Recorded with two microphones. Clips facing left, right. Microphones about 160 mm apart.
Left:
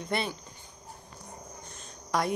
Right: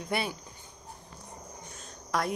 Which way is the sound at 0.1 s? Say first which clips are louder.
Even; 5° right (ahead or behind).